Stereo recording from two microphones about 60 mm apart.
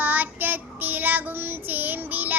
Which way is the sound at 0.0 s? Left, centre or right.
Right.